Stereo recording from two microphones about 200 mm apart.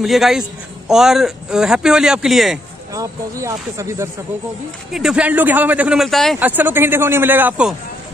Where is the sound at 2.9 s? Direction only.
15° right (ahead or behind); by 6.4 s centre (ahead or behind).